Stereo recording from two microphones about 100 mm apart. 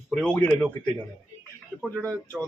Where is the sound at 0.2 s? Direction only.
15° left (ahead or behind).